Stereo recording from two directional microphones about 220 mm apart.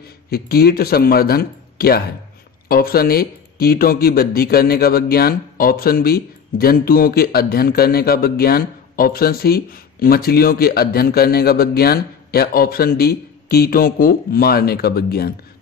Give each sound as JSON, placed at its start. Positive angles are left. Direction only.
{"t": 0.3, "sound": "speech", "side_deg": 45}